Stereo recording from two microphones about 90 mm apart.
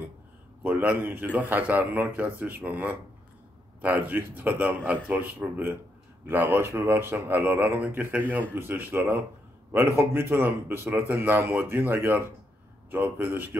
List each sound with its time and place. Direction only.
0.7 s speech: 15° right (ahead or behind)